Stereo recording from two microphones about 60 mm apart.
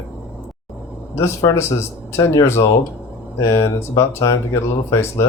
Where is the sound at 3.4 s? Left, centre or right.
Left.